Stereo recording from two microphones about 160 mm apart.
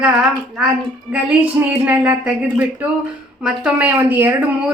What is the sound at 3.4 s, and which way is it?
Speech, 5° right (ahead or behind).